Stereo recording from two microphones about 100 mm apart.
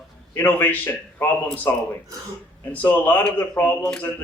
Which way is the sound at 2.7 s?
20° left (ahead or behind).